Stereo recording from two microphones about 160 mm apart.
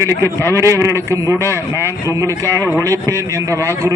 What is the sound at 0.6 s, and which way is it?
A man's voice, 20° right (ahead or behind).